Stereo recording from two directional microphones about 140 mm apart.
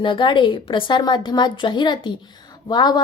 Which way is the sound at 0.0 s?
35° left (ahead or behind).